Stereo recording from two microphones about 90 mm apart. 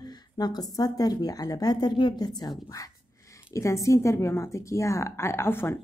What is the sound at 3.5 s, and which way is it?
A woman's voice, 35° left (ahead or behind).